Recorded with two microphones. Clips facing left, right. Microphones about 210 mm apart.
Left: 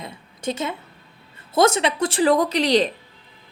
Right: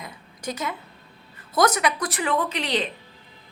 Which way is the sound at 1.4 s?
25° left (ahead or behind).